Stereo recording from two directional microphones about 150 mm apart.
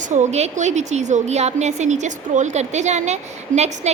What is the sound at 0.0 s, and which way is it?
Speech, 55° right (ahead or behind).